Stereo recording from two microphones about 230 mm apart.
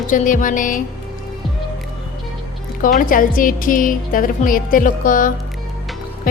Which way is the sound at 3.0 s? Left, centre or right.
Left.